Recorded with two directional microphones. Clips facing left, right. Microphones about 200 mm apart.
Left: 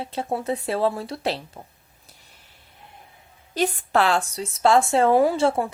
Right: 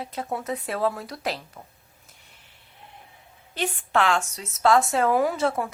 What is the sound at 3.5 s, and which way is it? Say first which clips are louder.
Speech: left 4 dB; 40° left (ahead or behind).